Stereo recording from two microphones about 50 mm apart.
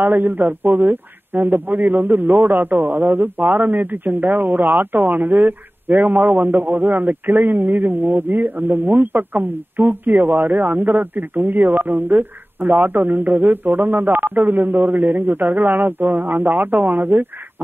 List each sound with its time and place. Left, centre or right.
0.0 s a man's voice: right